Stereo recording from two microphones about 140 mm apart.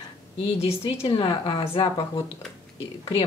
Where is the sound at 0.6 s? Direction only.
40° left (ahead or behind).